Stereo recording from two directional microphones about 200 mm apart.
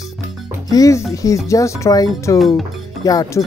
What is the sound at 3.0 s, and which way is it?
Speech, 15° left (ahead or behind).